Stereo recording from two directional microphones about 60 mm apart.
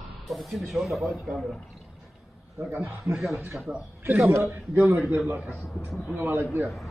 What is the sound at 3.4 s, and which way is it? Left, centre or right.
A man's voice, right.